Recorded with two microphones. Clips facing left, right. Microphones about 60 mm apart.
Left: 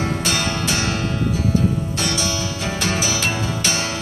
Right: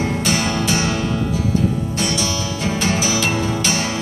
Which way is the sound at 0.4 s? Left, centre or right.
Left.